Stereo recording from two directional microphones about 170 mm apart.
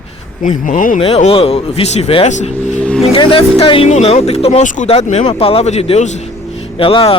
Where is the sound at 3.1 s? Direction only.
30° left (ahead or behind).